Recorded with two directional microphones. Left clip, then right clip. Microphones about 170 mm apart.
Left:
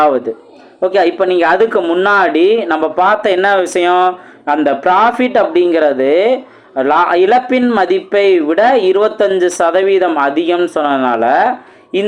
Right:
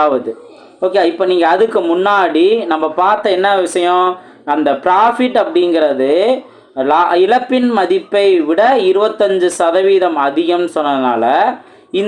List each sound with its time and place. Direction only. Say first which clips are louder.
0.8 s speech: left 1 dB; 20° left (ahead or behind)